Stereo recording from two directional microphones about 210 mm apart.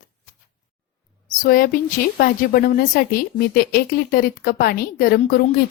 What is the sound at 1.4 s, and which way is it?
A woman's voice, 40° left (ahead or behind).